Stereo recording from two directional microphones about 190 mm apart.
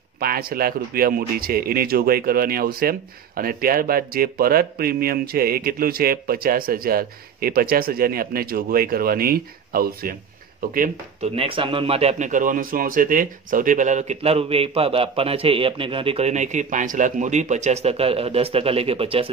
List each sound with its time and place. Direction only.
0.2 s a man's voice: 50° right (ahead or behind)
10.7 s speech: 40° right (ahead or behind)